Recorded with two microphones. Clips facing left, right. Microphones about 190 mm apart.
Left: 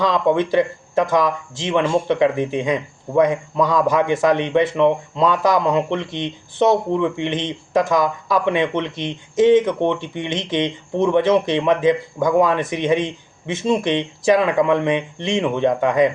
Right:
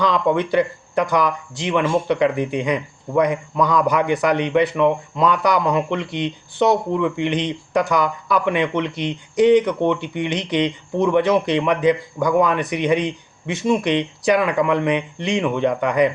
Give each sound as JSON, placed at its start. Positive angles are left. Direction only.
{"t": 0.0, "sound": "speech", "side_deg": 25}